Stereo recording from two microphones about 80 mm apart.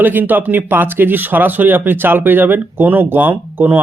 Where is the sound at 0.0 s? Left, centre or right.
Right.